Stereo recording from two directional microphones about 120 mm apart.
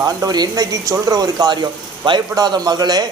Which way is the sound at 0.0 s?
30° right (ahead or behind).